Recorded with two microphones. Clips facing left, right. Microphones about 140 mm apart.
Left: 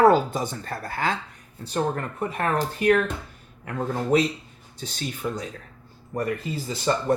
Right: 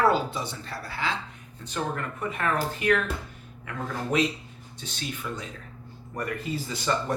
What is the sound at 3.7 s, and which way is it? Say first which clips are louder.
Speech: left 6 dB; 35° left (ahead or behind).